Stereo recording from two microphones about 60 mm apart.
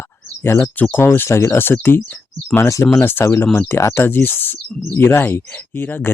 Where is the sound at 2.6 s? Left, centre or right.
Left.